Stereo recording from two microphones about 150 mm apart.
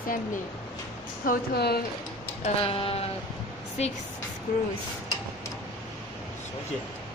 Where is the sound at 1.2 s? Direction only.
90° left.